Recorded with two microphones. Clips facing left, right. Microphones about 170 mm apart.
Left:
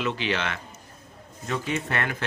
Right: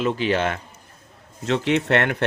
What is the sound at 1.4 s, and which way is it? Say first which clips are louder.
Speech: right 8 dB; 75° right (ahead or behind).